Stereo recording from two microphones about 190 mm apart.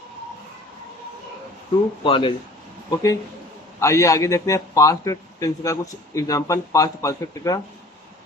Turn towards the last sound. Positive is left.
turn(degrees=15)  # may be behind; listen again after turning